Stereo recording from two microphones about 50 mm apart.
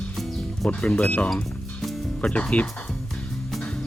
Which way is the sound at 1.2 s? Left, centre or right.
Centre.